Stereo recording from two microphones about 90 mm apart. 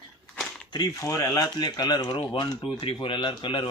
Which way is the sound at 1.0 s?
35° left (ahead or behind).